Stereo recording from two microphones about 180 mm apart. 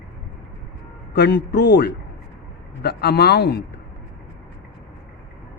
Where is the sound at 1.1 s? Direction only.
65° left (ahead or behind).